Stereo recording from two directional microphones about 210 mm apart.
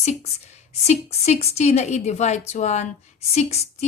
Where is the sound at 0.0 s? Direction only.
30° left (ahead or behind).